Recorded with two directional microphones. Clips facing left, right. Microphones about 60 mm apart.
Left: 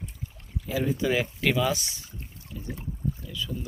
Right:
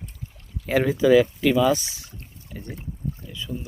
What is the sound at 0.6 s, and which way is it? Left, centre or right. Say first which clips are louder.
Speech: right 7 dB; right.